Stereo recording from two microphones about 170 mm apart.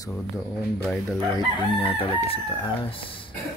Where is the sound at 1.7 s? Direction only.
30° left (ahead or behind).